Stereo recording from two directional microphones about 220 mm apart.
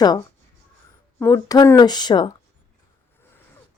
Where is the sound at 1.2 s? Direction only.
15° left (ahead or behind).